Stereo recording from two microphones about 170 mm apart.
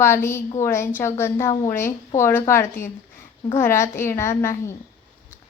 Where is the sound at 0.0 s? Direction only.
15° left (ahead or behind).